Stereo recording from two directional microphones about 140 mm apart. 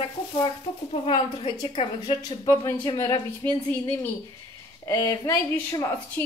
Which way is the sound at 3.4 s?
15° left (ahead or behind).